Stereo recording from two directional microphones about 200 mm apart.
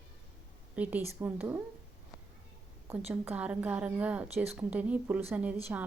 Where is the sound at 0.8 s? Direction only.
10° right (ahead or behind).